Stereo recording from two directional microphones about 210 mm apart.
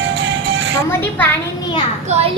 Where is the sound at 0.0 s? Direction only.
65° right (ahead or behind).